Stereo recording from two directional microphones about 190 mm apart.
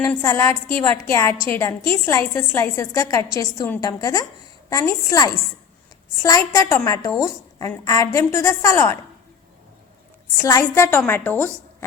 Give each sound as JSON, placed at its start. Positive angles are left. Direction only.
{"t": 0.1, "sound": "a woman's voice", "side_deg": 15}
{"t": 10.3, "sound": "a woman's voice", "side_deg": 15}